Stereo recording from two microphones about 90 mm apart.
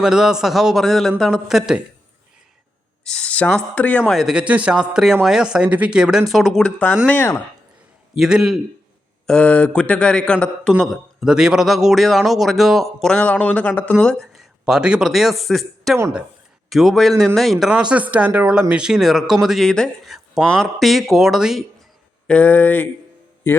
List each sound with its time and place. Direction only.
0.0 s a man's voice: 5° right (ahead or behind)
3.1 s a man's voice: 10° left (ahead or behind)
4.1 s a man's voice: 5° right (ahead or behind); by 7.0 s 15° left (ahead or behind)
8.2 s a man's voice: 5° right (ahead or behind)
9.2 s a man's voice: 10° left (ahead or behind)
10.8 s a man's voice: centre (ahead or behind)
14.6 s a man's voice: 10° right (ahead or behind)
17.7 s a man's voice: 10° right (ahead or behind)
22.3 s a man's voice: 15° left (ahead or behind)